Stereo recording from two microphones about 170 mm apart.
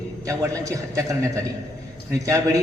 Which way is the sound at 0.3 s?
20° right (ahead or behind).